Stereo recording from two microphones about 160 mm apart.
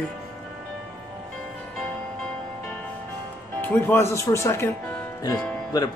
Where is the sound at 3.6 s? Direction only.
10° left (ahead or behind).